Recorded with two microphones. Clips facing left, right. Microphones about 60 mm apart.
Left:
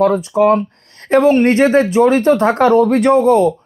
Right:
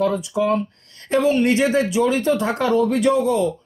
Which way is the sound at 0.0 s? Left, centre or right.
Left.